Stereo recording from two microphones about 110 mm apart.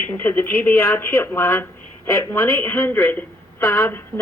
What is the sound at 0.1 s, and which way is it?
Speech, 20° left (ahead or behind).